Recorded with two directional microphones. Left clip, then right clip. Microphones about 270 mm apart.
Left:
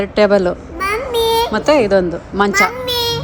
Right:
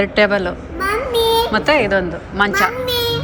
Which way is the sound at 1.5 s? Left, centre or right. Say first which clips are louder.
Left 2 dB; centre.